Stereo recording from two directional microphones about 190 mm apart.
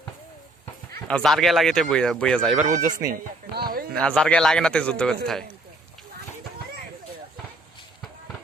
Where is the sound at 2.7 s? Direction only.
40° right (ahead or behind).